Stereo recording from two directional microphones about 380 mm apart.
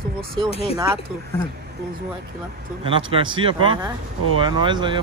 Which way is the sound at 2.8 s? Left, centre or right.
Centre.